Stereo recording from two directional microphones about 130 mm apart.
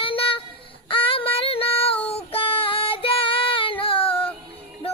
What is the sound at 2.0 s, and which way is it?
Female singing, 45° left (ahead or behind).